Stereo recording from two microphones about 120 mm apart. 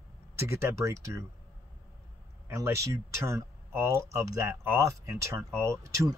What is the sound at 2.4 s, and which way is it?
Speech, 25° right (ahead or behind).